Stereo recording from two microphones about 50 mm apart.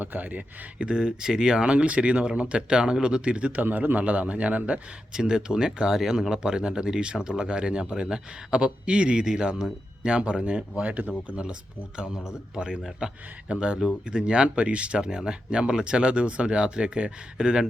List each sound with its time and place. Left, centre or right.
0.0 s speech: right
0.9 s speech: centre
3.6 s speech: right
5.1 s speech: centre